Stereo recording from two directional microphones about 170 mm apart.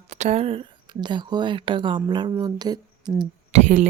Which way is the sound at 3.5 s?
45° right (ahead or behind).